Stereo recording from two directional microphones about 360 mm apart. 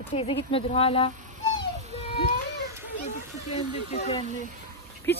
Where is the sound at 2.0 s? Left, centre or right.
Centre.